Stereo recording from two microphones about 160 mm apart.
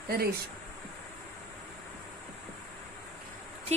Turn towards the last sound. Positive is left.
turn(degrees=-40)  # may be behind; listen again after turning